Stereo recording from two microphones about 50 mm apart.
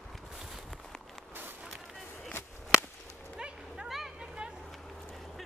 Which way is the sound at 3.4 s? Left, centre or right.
Centre.